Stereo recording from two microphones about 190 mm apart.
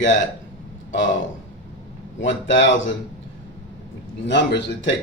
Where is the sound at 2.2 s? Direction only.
80° left.